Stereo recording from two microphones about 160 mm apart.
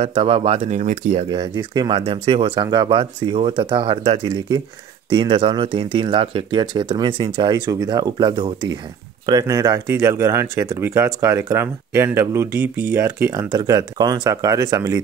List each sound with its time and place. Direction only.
0.0 s speech: 35° right (ahead or behind)
1.3 s speech: 30° right (ahead or behind)